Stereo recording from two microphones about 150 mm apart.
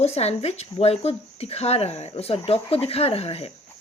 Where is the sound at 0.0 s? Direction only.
45° left (ahead or behind).